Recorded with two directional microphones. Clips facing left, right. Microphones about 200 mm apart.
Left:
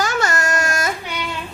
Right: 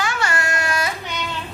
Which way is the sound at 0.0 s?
40° left (ahead or behind).